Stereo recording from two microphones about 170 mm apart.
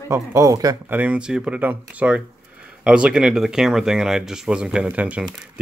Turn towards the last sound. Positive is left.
turn(degrees=-5)  # may be behind; listen again after turning